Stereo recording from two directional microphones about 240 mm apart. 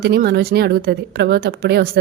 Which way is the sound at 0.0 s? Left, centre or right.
Right.